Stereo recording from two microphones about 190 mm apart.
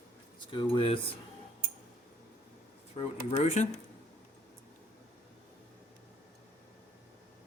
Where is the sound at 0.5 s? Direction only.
30° left (ahead or behind).